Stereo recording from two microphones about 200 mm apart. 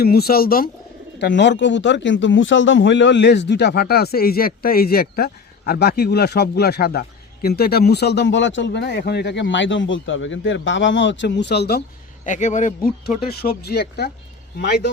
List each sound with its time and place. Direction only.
0.0 s speech: 50° left (ahead or behind)
1.2 s a man's voice: 60° left (ahead or behind)
12.2 s speech: 40° left (ahead or behind); by 14.8 s 55° left (ahead or behind)